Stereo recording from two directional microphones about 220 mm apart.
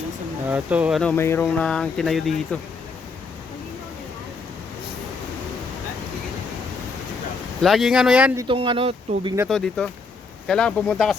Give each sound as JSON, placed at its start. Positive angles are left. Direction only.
{"t": 0.4, "sound": "speech", "side_deg": -5}
{"t": 7.6, "sound": "speech", "side_deg": 0}
{"t": 8.4, "sound": "speech", "side_deg": -25}
{"t": 9.5, "sound": "speech", "side_deg": 0}